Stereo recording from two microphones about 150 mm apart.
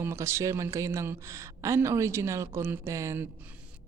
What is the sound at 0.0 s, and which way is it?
Speech, 20° right (ahead or behind).